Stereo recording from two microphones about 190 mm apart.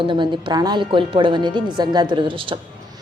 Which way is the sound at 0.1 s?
25° right (ahead or behind).